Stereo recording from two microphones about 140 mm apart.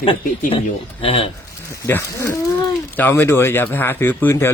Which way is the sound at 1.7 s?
20° left (ahead or behind).